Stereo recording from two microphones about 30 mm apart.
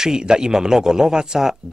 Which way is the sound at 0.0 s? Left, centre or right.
Right.